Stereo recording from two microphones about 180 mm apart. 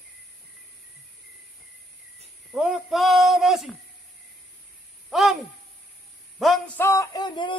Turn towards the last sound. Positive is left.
turn(degrees=25)  # may be behind; listen again after turning